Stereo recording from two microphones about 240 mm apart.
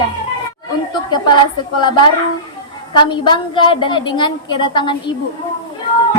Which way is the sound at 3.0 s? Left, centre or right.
Centre.